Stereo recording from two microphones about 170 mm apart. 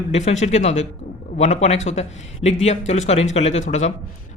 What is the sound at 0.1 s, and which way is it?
Speech, 40° left (ahead or behind).